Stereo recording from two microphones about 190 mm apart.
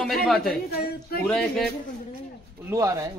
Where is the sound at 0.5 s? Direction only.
50° left (ahead or behind).